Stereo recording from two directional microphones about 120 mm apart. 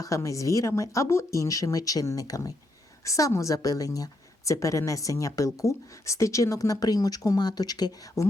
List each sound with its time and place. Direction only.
0.0 s speech: 25° left (ahead or behind)